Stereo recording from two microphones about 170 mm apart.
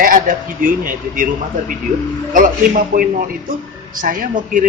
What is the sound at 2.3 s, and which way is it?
A man's voice, 55° right (ahead or behind).